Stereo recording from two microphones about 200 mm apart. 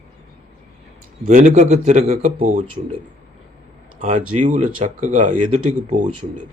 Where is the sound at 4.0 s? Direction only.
35° right (ahead or behind).